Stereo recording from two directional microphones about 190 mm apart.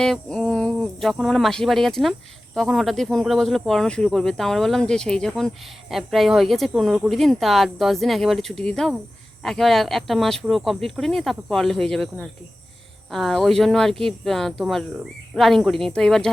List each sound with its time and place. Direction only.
0.0 s speech: 5° left (ahead or behind)